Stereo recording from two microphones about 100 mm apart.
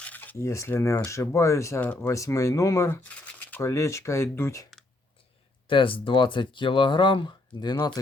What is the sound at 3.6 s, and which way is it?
Speech, 30° left (ahead or behind).